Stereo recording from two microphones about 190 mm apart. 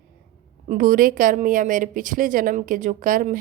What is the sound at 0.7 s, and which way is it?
A woman's voice, 45° right (ahead or behind).